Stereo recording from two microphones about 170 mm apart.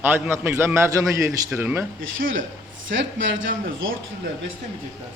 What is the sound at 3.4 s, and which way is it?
Speech, 90° right.